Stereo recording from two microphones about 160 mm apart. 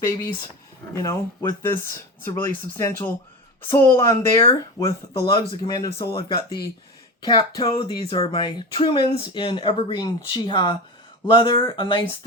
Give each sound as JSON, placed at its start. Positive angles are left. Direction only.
{"t": 0.0, "sound": "speech", "side_deg": 15}
{"t": 4.9, "sound": "speech", "side_deg": 30}